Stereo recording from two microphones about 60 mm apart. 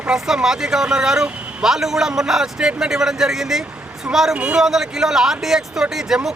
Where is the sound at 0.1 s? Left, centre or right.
Centre.